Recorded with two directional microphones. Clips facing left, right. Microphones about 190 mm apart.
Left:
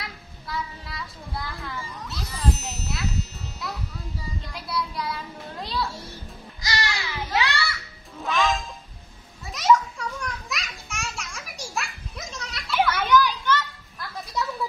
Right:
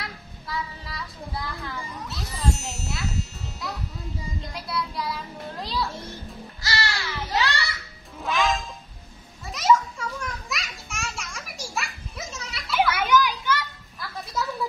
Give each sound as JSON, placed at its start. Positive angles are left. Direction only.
{"t": 0.0, "sound": "child singing", "side_deg": 0}
{"t": 2.0, "sound": "music", "side_deg": 0}
{"t": 4.4, "sound": "child singing", "side_deg": 0}
{"t": 6.6, "sound": "a sound", "side_deg": 15}
{"t": 8.2, "sound": "music", "side_deg": 0}
{"t": 9.5, "sound": "children playing", "side_deg": 0}
{"t": 13.9, "sound": "music", "side_deg": 0}